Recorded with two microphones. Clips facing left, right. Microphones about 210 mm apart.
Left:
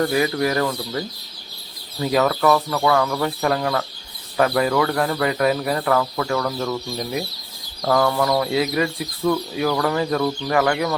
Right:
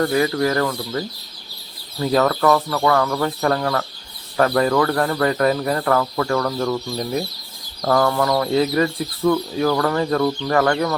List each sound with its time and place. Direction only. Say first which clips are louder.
0.0 s speech: right 1 dB; 15° left (ahead or behind); by 9.4 s centre (ahead or behind)
9.8 s speech: right 2 dB; 10° left (ahead or behind)